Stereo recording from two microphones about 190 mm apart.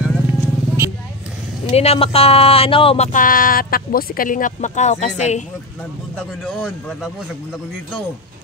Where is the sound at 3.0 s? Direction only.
45° left (ahead or behind).